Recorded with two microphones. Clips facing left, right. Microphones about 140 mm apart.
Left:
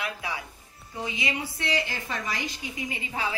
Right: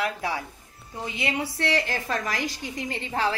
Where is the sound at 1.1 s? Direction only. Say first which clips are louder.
Right 7 dB; 70° right (ahead or behind).